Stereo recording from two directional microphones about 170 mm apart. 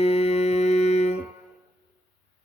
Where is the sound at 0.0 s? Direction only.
35° left (ahead or behind).